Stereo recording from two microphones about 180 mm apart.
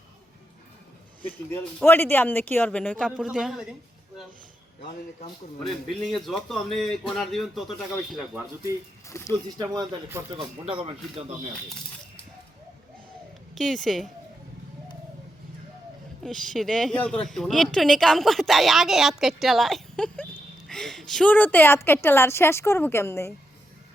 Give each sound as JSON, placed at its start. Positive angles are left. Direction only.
{"t": 1.9, "sound": "a woman's voice", "side_deg": 10}
{"t": 3.1, "sound": "a man's voice", "side_deg": -5}
{"t": 5.6, "sound": "a man's voice", "side_deg": 0}
{"t": 9.0, "sound": "a woman's voice", "side_deg": 15}
{"t": 9.7, "sound": "speech", "side_deg": -15}
{"t": 10.3, "sound": "speech", "side_deg": -30}
{"t": 13.6, "sound": "a man's voice", "side_deg": 0}
{"t": 16.2, "sound": "a man's voice", "side_deg": 0}